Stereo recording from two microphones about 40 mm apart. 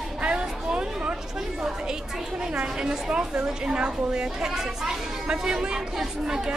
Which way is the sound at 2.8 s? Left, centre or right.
Centre.